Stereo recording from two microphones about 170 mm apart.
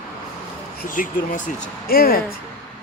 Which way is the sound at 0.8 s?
50° left (ahead or behind).